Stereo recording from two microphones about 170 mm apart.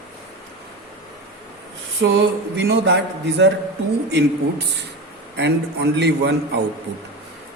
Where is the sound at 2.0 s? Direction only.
90° right.